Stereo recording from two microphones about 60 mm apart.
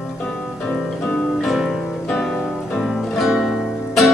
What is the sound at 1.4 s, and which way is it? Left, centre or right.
Music, centre.